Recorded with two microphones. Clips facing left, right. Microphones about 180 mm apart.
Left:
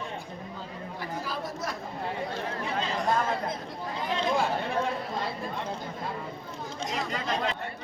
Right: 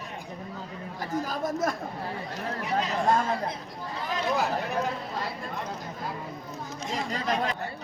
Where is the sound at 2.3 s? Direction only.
30° left (ahead or behind).